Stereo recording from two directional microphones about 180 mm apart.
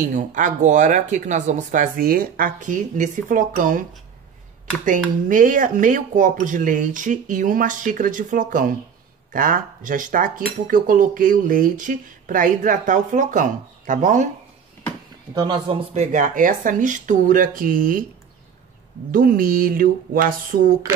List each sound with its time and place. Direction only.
0.1 s speech: 45° right (ahead or behind)
4.8 s speech: 50° right (ahead or behind)
15.3 s speech: 25° right (ahead or behind); by 18.0 s 50° right (ahead or behind)
19.1 s speech: 50° right (ahead or behind)